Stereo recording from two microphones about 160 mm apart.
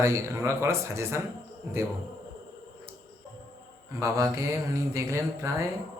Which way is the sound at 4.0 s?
20° right (ahead or behind).